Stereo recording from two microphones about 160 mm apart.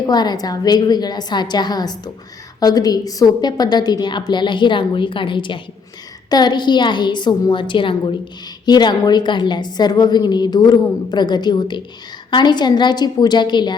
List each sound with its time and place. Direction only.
0.1 s a woman's voice: 25° left (ahead or behind)